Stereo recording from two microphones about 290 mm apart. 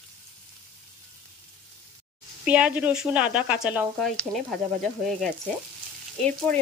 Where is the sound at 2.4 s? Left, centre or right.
Centre.